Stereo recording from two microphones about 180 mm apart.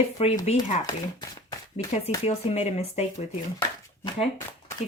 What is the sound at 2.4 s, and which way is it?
Speech, 35° left (ahead or behind).